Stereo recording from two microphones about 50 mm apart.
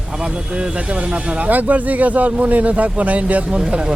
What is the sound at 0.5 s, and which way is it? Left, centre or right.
Speech, right.